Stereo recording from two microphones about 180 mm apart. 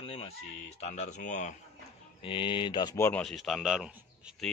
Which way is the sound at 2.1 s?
30° left (ahead or behind).